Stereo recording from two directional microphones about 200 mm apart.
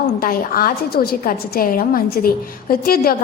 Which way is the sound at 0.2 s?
45° left (ahead or behind).